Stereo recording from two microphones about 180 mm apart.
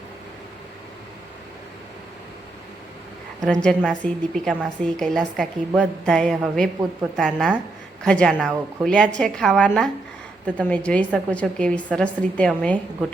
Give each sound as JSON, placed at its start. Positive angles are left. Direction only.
{"t": 3.4, "sound": "a woman's voice", "side_deg": 5}